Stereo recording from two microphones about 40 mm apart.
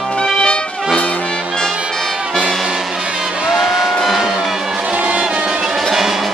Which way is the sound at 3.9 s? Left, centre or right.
Centre.